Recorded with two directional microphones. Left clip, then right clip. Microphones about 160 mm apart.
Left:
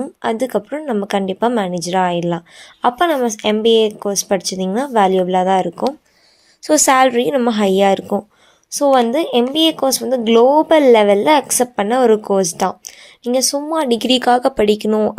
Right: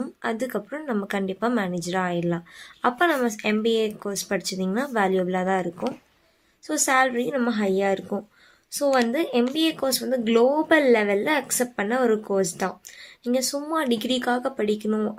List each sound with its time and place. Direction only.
0.2 s speech: 30° left (ahead or behind)
6.6 s speech: 45° left (ahead or behind)